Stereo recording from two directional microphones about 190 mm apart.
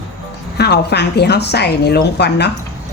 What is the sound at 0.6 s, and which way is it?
A woman's voice, 60° left (ahead or behind).